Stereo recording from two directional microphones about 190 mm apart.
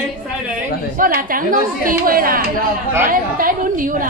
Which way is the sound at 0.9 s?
50° right (ahead or behind).